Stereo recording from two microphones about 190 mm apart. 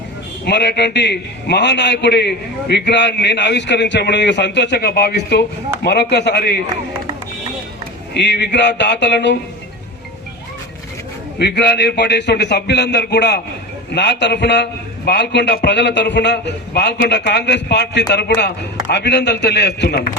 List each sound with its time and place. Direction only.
0.4 s a man's voice: 60° left (ahead or behind)
8.1 s a man's voice: 65° left (ahead or behind)
11.3 s a man's voice: 60° left (ahead or behind)